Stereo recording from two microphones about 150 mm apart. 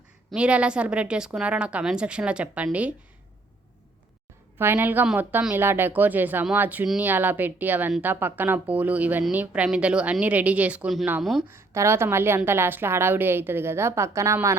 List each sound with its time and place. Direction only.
0.3 s a woman's voice: 5° right (ahead or behind)
4.5 s a woman's voice: 15° right (ahead or behind)
11.4 s a woman's voice: 20° right (ahead or behind)